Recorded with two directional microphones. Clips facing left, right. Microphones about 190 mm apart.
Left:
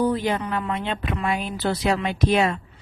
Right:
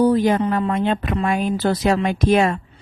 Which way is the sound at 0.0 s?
40° right (ahead or behind).